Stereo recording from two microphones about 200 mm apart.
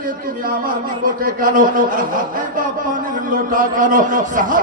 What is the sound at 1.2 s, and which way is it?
Speech, 45° right (ahead or behind).